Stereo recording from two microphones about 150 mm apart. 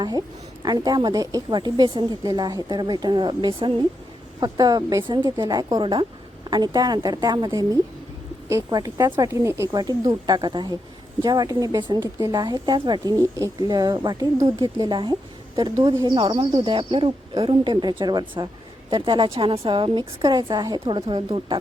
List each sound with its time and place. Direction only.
0.0 s a woman's voice: 25° right (ahead or behind)